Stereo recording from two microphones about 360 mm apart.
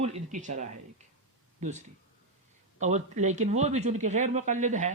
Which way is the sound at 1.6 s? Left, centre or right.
Centre.